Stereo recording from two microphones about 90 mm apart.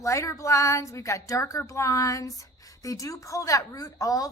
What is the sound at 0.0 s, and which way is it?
A woman's voice, 35° left (ahead or behind).